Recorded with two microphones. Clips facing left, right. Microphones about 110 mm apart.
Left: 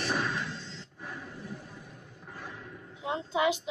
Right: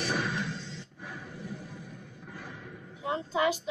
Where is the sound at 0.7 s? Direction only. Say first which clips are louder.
Even; 45° left (ahead or behind).